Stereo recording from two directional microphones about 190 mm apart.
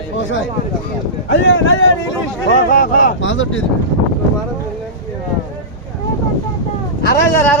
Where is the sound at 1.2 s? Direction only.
80° left.